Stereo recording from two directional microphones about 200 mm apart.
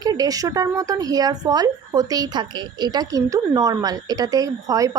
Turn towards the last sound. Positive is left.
turn(degrees=-15)  # may be behind; listen again after turning